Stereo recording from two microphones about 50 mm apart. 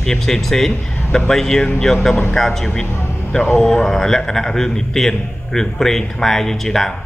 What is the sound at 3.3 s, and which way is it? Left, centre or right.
Speech, left.